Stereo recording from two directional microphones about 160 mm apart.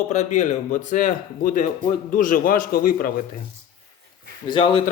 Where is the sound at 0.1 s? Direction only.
45° left (ahead or behind).